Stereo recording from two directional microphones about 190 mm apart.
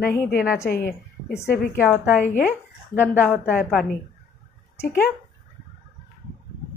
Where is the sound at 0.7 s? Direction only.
55° left (ahead or behind).